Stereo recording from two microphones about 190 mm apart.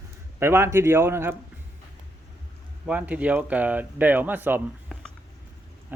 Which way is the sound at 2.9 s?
5° right (ahead or behind).